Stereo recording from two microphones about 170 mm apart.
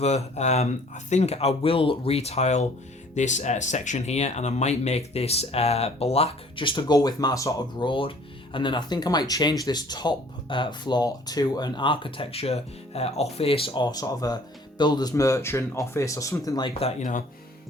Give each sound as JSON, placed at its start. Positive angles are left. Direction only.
{"t": 0.0, "sound": "speech", "side_deg": 40}
{"t": 17.0, "sound": "speech", "side_deg": 50}